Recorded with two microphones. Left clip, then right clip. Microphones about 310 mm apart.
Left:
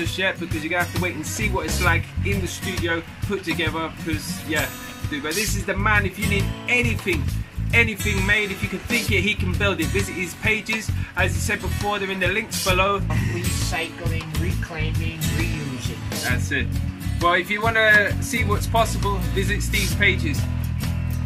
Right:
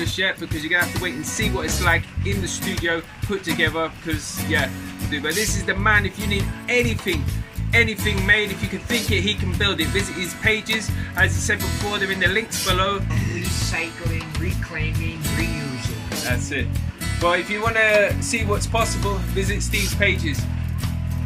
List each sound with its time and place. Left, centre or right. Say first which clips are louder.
0.2 s music: even; centre
5.2 s music: right 2 dB; centre
16.2 s speech: left 1 dB; centre
17.2 s music: left 1 dB; centre